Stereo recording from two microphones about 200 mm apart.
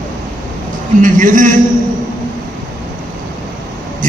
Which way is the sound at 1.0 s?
40° right (ahead or behind).